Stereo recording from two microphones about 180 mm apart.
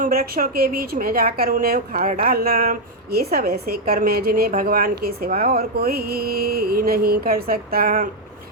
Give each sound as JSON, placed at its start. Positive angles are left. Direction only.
{"t": 0.0, "sound": "a woman's voice", "side_deg": -50}